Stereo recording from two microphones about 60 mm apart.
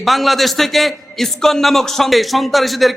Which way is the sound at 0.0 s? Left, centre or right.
Centre.